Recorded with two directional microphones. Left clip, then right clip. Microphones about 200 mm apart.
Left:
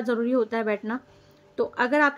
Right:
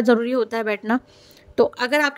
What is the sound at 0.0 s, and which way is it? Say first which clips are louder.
Speech: right 6 dB; 45° right (ahead or behind).